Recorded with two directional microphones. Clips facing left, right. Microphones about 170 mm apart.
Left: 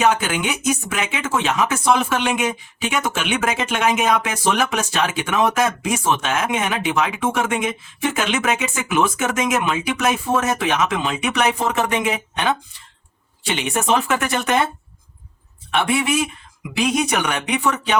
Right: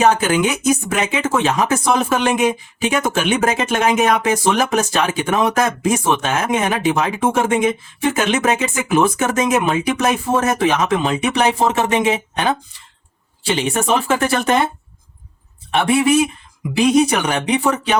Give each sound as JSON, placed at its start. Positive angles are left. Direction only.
{"t": 0.0, "sound": "speech", "side_deg": -40}
{"t": 15.7, "sound": "speech", "side_deg": -35}